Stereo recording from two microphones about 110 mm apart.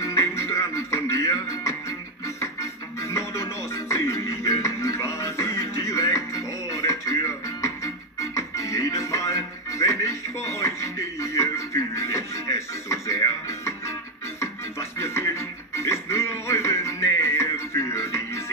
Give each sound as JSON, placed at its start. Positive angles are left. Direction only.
{"t": 0.0, "sound": "music", "side_deg": 25}